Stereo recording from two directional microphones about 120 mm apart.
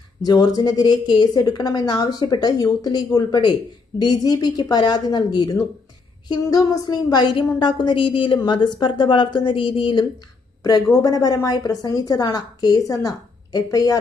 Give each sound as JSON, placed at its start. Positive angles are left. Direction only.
{"t": 0.2, "sound": "a woman's voice", "side_deg": 30}
{"t": 10.6, "sound": "a woman's voice", "side_deg": 30}